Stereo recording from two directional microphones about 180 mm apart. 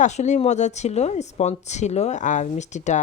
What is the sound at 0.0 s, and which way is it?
Speech, 40° left (ahead or behind).